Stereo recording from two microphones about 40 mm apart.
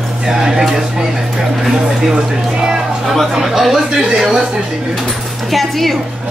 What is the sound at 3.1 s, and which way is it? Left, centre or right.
Speech, centre.